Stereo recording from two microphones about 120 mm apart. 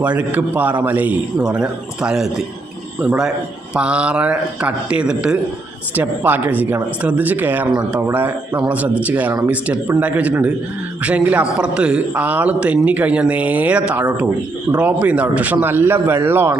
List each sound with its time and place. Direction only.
0.0 s speech: 10° right (ahead or behind)
3.8 s speech: 10° right (ahead or behind)